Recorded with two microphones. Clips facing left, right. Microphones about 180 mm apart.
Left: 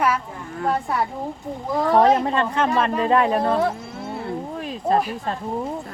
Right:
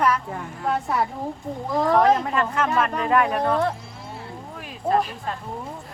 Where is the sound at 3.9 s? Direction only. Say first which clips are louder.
Left 7 dB; 60° left (ahead or behind).